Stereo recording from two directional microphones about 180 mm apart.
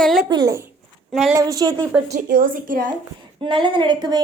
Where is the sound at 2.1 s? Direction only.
50° right (ahead or behind).